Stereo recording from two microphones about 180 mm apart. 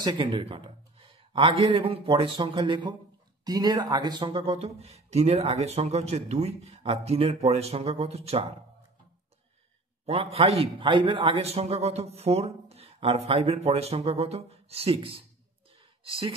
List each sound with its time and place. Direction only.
0.0 s a man's voice: 30° right (ahead or behind)
10.0 s speech: 35° right (ahead or behind)